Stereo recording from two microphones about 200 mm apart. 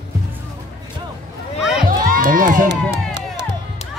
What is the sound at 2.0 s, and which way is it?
Crowd, 45° right (ahead or behind).